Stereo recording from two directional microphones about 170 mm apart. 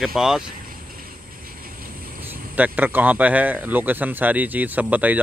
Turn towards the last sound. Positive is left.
turn(degrees=-10)  # may be behind; listen again after turning